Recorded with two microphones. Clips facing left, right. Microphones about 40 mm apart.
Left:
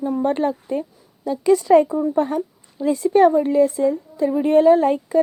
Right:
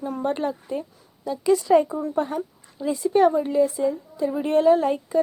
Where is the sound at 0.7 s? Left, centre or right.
Left.